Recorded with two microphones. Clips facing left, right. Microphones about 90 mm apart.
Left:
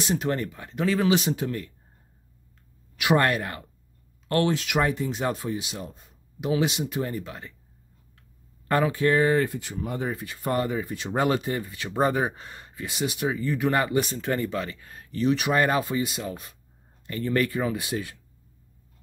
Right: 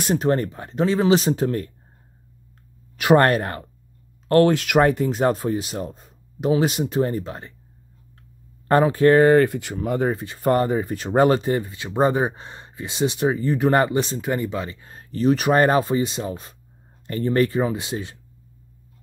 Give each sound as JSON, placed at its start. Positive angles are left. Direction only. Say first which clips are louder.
{"t": 0.0, "sound": "speech", "louder": "right 5 dB", "side_deg": -50}
{"t": 0.3, "sound": "speech", "louder": "right 7 dB", "side_deg": -35}
{"t": 3.0, "sound": "speech", "louder": "right 6 dB", "side_deg": -40}
{"t": 4.5, "sound": "speech", "louder": "right 7 dB", "side_deg": -55}
{"t": 8.6, "sound": "speech", "louder": "right 7 dB", "side_deg": -35}
{"t": 10.0, "sound": "speech", "louder": "right 7 dB", "side_deg": -30}
{"t": 10.4, "sound": "speech", "louder": "right 7 dB", "side_deg": -40}
{"t": 11.7, "sound": "speech", "louder": "right 2 dB", "side_deg": -20}
{"t": 14.2, "sound": "speech", "louder": "right 2 dB", "side_deg": -15}